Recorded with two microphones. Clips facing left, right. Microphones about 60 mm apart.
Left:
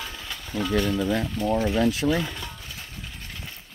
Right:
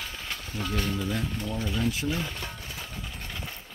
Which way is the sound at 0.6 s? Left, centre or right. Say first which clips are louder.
Left 7 dB; left.